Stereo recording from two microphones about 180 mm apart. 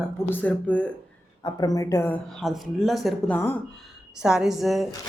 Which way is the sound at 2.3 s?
Centre (ahead or behind).